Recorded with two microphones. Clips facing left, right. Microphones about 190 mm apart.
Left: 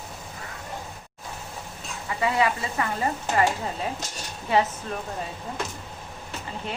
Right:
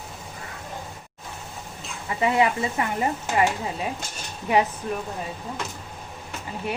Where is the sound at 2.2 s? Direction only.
25° right (ahead or behind).